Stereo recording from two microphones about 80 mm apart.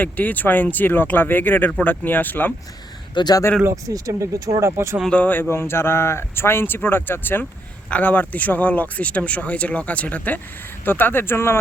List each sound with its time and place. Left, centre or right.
0.0 s speech: left
3.2 s speech: left
3.7 s speech: right
5.0 s speech: centre